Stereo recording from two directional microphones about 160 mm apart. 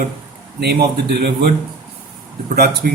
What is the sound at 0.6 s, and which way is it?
Speech, 85° right.